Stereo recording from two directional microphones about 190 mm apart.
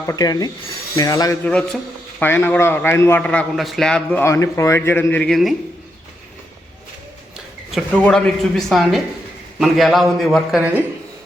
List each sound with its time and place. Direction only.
0.0 s speech: 15° left (ahead or behind)
1.5 s a man's voice: 5° left (ahead or behind)
7.7 s a man's voice: 5° left (ahead or behind)